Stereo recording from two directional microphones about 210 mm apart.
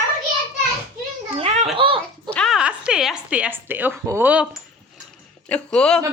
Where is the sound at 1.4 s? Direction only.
25° right (ahead or behind).